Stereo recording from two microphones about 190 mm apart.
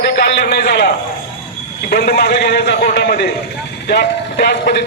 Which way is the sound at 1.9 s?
55° left (ahead or behind).